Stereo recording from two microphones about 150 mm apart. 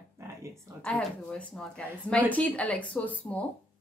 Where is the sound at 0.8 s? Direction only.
5° left (ahead or behind).